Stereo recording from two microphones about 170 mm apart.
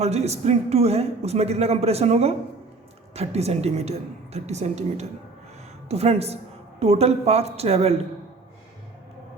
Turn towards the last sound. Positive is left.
turn(degrees=-35)  # may be behind; listen again after turning